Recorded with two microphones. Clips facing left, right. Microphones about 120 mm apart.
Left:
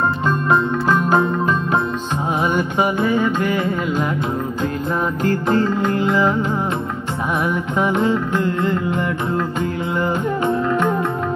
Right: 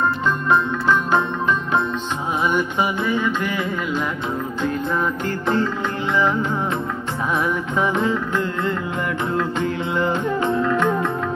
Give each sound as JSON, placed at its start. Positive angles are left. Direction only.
{"t": 0.5, "sound": "music", "side_deg": 40}
{"t": 2.4, "sound": "music", "side_deg": 45}
{"t": 5.2, "sound": "music", "side_deg": 40}
{"t": 9.6, "sound": "music", "side_deg": 10}